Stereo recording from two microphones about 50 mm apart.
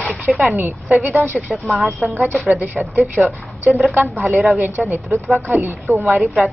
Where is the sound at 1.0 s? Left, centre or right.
Right.